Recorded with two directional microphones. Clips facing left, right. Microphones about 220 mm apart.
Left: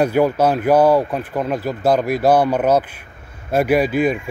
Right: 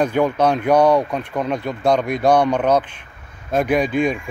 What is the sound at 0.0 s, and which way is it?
Speech, 5° left (ahead or behind).